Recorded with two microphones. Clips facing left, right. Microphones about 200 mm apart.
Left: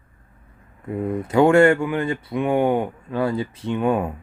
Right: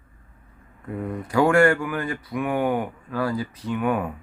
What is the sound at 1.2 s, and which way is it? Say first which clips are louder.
Speech: left 4 dB; 25° left (ahead or behind).